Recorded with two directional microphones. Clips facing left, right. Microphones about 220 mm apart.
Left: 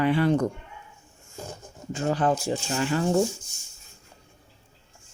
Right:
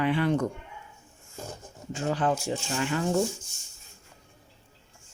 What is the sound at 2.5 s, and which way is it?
Speech, 35° left (ahead or behind).